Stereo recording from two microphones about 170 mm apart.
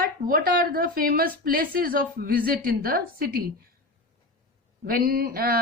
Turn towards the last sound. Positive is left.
turn(degrees=-60)  # may be behind; listen again after turning